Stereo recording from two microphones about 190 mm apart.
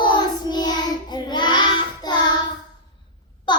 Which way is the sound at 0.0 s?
25° left (ahead or behind).